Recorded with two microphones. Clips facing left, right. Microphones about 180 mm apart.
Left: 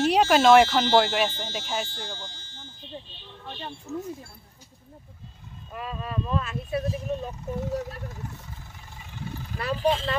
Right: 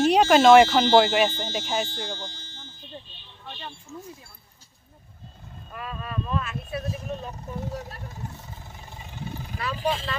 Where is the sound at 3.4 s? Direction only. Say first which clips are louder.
Left 2 dB; 40° left (ahead or behind).